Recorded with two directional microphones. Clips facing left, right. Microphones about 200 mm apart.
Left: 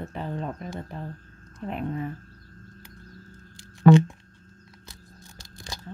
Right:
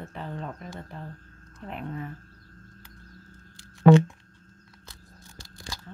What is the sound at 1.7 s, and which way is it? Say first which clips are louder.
Speech: left 5 dB; 20° left (ahead or behind).